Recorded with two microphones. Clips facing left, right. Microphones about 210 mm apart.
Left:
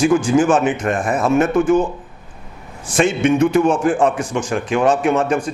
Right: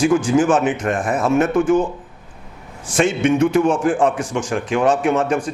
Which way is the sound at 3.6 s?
30° left (ahead or behind).